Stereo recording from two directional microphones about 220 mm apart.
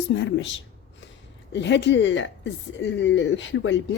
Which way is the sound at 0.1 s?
55° left (ahead or behind).